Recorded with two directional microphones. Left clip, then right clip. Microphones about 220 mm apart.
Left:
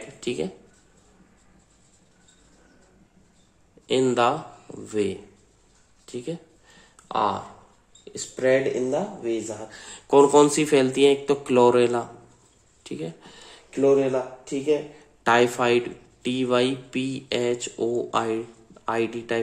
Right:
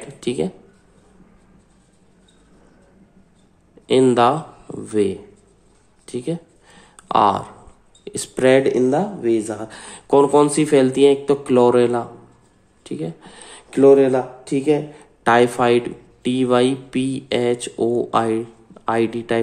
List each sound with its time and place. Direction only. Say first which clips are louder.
0.2 s speech: right 6 dB; 5° right (ahead or behind)
3.8 s speech: right 7 dB; 10° right (ahead or behind)
6.0 s a sound: right 7 dB; 10° right (ahead or behind)
8.0 s speech: right 7 dB; 20° right (ahead or behind)
9.8 s speech: right 2 dB; 5° right (ahead or behind)
12.8 s a sound: right 5 dB; centre (ahead or behind)
13.7 s speech: right 8 dB; 25° right (ahead or behind)
15.2 s speech: right 5 dB; 5° right (ahead or behind)